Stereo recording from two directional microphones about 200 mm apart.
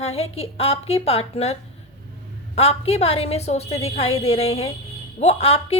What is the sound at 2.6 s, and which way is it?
A woman's voice, 30° left (ahead or behind).